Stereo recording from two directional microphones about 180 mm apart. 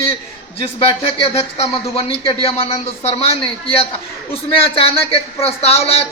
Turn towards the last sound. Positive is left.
turn(degrees=35)  # may be behind; listen again after turning